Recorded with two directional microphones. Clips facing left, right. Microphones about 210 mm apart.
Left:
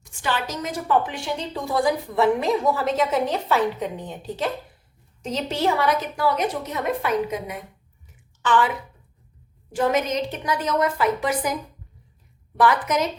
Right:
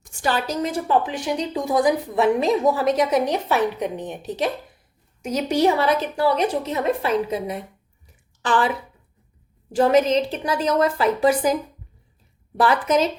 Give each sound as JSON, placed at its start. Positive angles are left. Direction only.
{"t": 0.0, "sound": "a woman's voice", "side_deg": -40}
{"t": 5.7, "sound": "a woman's voice", "side_deg": -25}
{"t": 8.0, "sound": "a sound", "side_deg": -35}
{"t": 9.7, "sound": "a woman's voice", "side_deg": -30}
{"t": 12.5, "sound": "a woman's voice", "side_deg": -30}